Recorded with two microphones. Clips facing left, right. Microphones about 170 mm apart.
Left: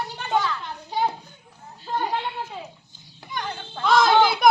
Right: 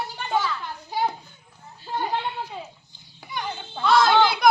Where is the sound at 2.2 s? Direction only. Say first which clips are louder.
Even; centre (ahead or behind).